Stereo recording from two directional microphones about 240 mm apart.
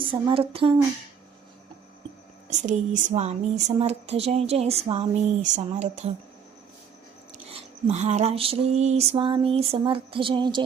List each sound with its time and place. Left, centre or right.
0.0 s speech: right
2.5 s speech: right
7.4 s speech: right